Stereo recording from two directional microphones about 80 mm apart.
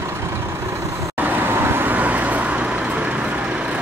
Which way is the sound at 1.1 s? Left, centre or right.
Right.